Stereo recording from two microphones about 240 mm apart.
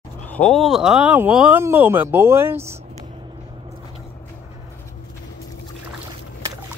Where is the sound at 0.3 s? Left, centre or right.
Centre.